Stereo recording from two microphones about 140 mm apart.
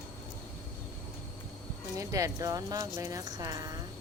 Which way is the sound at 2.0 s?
20° right (ahead or behind).